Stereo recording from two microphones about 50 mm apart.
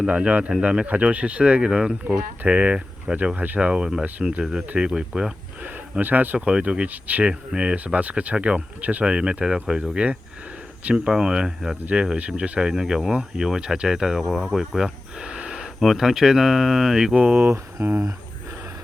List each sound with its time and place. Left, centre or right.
0.0 s speech: right
3.2 s speech: right
3.7 s speech: centre
5.6 s speech: right
6.4 s speech: right
7.3 s speech: centre
9.1 s speech: centre
11.9 s speech: right
12.5 s speech: centre
15.8 s speech: centre
17.2 s speech: right
17.8 s speech: right